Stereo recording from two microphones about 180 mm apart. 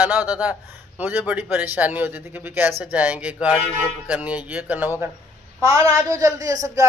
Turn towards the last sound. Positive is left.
turn(degrees=-20)  # may be behind; listen again after turning